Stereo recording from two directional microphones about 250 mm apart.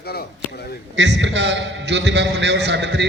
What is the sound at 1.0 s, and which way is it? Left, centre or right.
A man's voice, right.